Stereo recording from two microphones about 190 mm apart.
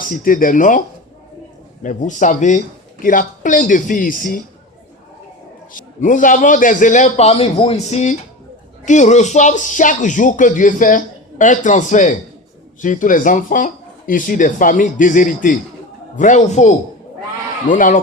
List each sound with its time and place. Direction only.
0.1 s speech: 45° left (ahead or behind)
1.8 s speech: 40° left (ahead or behind)
6.0 s speech: 45° left (ahead or behind)